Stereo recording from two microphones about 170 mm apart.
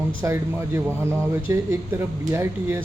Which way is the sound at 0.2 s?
15° right (ahead or behind).